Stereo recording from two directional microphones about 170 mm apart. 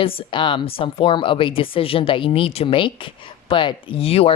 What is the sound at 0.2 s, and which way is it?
A woman's voice, 30° left (ahead or behind).